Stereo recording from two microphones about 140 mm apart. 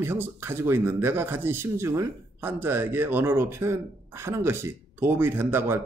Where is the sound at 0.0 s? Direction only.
15° right (ahead or behind).